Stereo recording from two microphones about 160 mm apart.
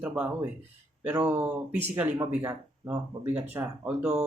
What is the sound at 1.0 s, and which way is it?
Speech, 15° right (ahead or behind).